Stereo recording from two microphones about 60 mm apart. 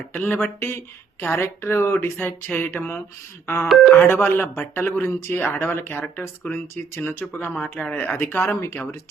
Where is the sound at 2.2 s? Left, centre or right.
Left.